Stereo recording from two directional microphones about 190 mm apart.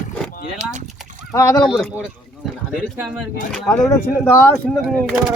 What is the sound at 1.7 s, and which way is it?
Speech, centre (ahead or behind).